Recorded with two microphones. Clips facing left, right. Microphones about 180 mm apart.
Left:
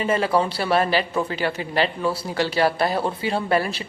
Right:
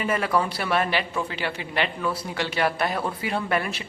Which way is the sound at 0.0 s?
30° left (ahead or behind).